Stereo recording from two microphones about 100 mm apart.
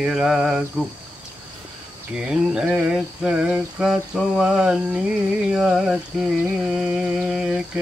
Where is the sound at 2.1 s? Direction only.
10° right (ahead or behind).